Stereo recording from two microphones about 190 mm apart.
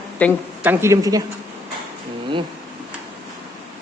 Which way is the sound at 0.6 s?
10° right (ahead or behind).